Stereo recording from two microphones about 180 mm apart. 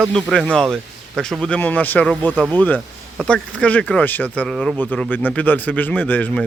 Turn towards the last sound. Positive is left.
turn(degrees=10)  # may be behind; listen again after turning